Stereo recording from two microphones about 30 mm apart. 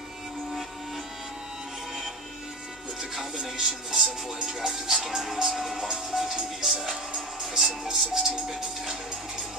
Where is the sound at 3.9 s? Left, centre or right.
Centre.